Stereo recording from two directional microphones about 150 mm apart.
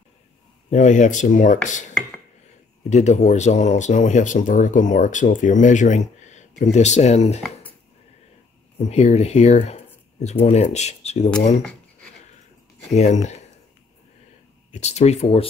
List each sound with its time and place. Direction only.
0.7 s speech: 55° left (ahead or behind)
2.9 s speech: 50° left (ahead or behind)
8.7 s speech: 45° left (ahead or behind)
12.9 s speech: 50° left (ahead or behind)
14.7 s speech: 50° left (ahead or behind)